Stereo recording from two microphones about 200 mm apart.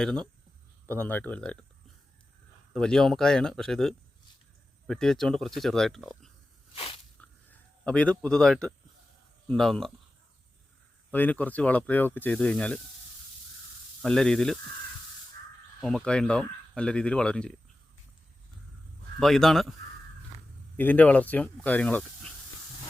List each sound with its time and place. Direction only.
0.0 s speech: 5° left (ahead or behind)
2.7 s speech: centre (ahead or behind)
6.7 s a sound: 30° left (ahead or behind)
7.9 s speech: 5° left (ahead or behind)
11.1 s speech: 10° left (ahead or behind)
14.0 s speech: 5° left (ahead or behind)
15.8 s speech: centre (ahead or behind)
19.2 s speech: centre (ahead or behind)
20.7 s speech: 10° left (ahead or behind)